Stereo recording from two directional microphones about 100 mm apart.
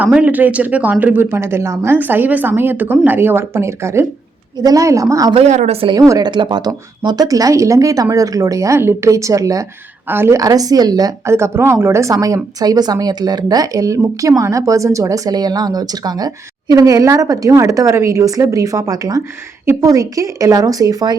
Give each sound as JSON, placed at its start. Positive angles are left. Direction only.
{"t": 0.0, "sound": "speech", "side_deg": -15}
{"t": 5.3, "sound": "a woman's voice", "side_deg": -80}
{"t": 5.9, "sound": "speech", "side_deg": -40}
{"t": 10.1, "sound": "speech", "side_deg": -25}
{"t": 10.4, "sound": "speech", "side_deg": -40}
{"t": 11.3, "sound": "speech", "side_deg": -25}